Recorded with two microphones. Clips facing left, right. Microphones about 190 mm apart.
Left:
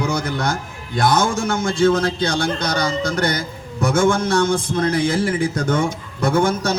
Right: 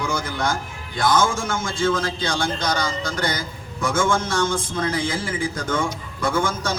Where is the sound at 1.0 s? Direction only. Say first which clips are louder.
Left 2 dB; 65° left (ahead or behind).